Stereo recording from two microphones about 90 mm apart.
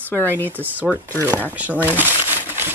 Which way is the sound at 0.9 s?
10° left (ahead or behind).